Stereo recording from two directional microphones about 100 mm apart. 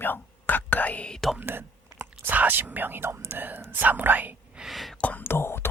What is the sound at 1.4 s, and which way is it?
Whispering, 20° right (ahead or behind).